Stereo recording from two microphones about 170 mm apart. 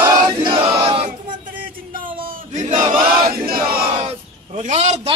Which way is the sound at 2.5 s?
40° right (ahead or behind).